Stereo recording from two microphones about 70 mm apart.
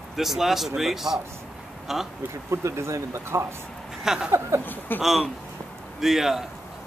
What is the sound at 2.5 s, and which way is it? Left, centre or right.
Speech, right.